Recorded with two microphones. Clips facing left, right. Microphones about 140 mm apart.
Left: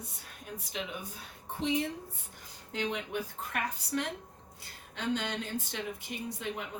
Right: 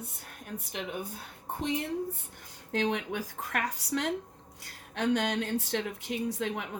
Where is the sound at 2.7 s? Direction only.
75° right (ahead or behind).